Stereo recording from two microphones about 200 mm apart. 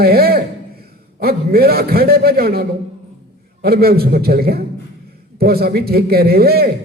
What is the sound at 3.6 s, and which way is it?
A man's voice, 50° right (ahead or behind).